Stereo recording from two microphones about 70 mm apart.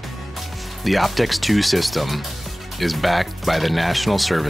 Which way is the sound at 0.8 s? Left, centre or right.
Centre.